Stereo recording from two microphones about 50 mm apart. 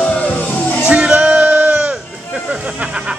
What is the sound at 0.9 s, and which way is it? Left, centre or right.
Music, right.